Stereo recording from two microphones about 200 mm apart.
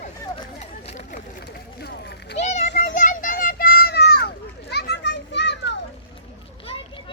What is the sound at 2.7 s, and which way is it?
Children playing, 45° left (ahead or behind).